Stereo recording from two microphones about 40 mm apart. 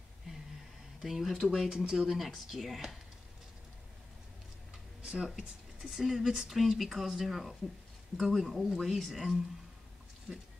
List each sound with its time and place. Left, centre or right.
1.0 s speech: centre
5.0 s a sound: right
5.3 s speech: centre